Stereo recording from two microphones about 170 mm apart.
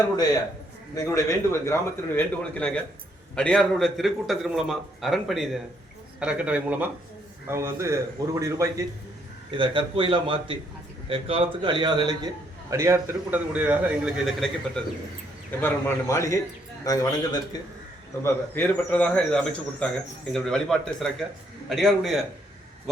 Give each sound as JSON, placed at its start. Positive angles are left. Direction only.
{"t": 0.9, "sound": "a man's voice", "side_deg": 20}
{"t": 9.5, "sound": "a man's voice", "side_deg": -30}
{"t": 15.6, "sound": "a man's voice", "side_deg": 15}
{"t": 18.2, "sound": "a man's voice", "side_deg": 10}